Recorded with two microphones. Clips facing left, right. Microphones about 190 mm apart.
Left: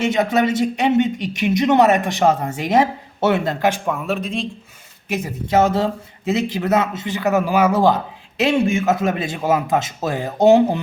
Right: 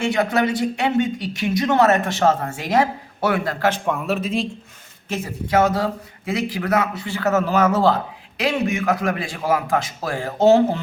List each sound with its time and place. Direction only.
0.0 s speech: 20° left (ahead or behind)
3.8 s speech: centre (ahead or behind)
5.0 s speech: 15° left (ahead or behind)